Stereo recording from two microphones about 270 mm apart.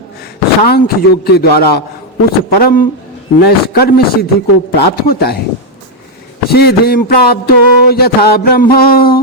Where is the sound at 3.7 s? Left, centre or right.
Left.